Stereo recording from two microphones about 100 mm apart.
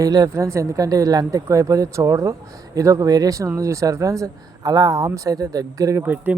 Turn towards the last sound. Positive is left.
turn(degrees=-20)  # may be behind; listen again after turning